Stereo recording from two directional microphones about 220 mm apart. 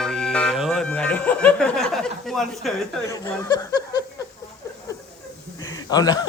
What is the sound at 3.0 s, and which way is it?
Speech, 15° left (ahead or behind).